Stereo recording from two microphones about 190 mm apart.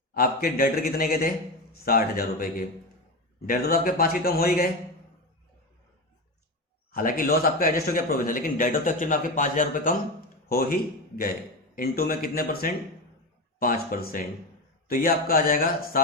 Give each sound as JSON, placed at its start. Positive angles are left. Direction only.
{"t": 0.1, "sound": "speech", "side_deg": 50}
{"t": 6.9, "sound": "speech", "side_deg": 45}